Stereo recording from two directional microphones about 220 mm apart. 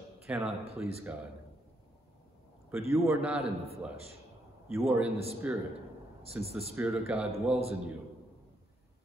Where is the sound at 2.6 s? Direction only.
10° right (ahead or behind).